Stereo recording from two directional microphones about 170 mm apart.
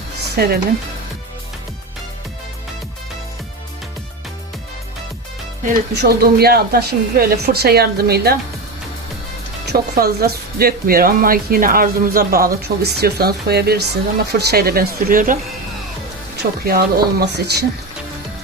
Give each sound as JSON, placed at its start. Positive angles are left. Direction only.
{"t": 0.3, "sound": "speech", "side_deg": -65}
{"t": 5.9, "sound": "speech", "side_deg": -70}
{"t": 9.6, "sound": "speech", "side_deg": -65}
{"t": 16.4, "sound": "speech", "side_deg": -65}